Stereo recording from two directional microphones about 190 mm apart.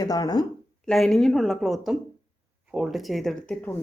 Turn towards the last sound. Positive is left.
turn(degrees=5)  # may be behind; listen again after turning